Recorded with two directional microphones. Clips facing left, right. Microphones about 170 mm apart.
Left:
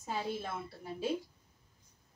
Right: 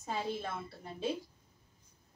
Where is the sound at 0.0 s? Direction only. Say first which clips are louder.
Even; 5° left (ahead or behind).